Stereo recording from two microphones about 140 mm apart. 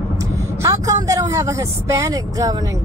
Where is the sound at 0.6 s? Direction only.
20° right (ahead or behind).